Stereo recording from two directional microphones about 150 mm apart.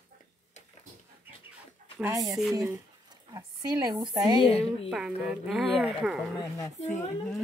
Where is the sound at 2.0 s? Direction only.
20° right (ahead or behind).